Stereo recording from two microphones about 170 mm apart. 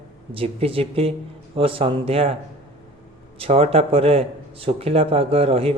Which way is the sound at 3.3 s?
35° right (ahead or behind).